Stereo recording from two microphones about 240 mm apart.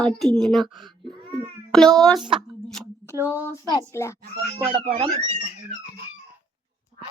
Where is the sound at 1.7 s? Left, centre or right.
Centre.